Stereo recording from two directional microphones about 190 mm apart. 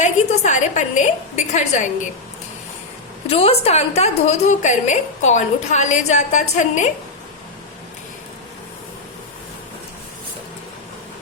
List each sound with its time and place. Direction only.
0.0 s a woman's voice: 35° left (ahead or behind)
3.2 s a woman's voice: 30° left (ahead or behind)